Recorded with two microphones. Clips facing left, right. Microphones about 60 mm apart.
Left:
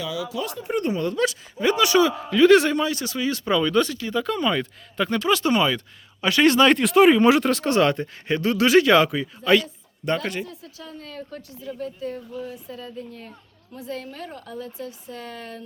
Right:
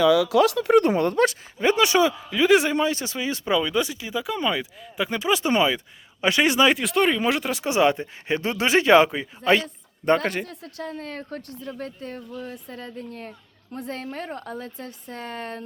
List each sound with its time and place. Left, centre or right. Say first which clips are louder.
0.3 s speech: right 10 dB; right
1.5 s speech: left 1 dB; right
2.3 s speech: left 5 dB; centre; by 9.6 s right
10.1 s speech: right 4 dB; right